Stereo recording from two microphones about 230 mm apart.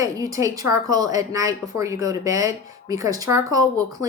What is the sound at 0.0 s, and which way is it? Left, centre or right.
Speech, centre.